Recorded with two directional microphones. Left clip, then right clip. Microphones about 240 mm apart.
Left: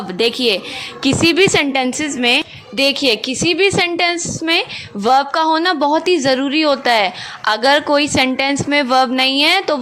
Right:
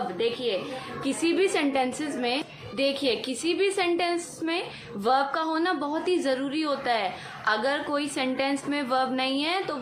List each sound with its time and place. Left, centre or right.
0.2 s speech: left
1.0 s a woman's voice: left